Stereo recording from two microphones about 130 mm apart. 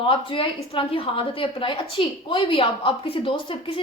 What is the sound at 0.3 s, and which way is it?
A woman's voice, 45° left (ahead or behind).